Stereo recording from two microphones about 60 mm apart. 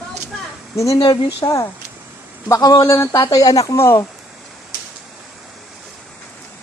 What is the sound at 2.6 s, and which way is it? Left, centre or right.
Speech, left.